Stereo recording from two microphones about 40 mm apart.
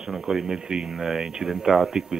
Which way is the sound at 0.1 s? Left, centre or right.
Centre.